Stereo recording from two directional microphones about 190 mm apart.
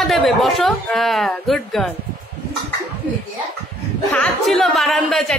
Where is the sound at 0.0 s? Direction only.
Centre (ahead or behind).